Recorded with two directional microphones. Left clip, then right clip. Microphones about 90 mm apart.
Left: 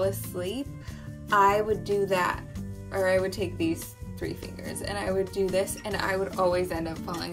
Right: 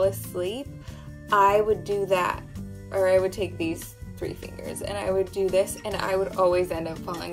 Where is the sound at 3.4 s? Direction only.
15° right (ahead or behind).